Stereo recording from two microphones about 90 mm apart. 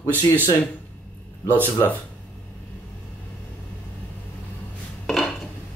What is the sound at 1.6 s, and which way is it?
Speech, 20° left (ahead or behind).